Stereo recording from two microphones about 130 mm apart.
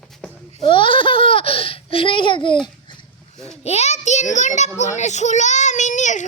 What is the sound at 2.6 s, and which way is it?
Babbling, 35° left (ahead or behind).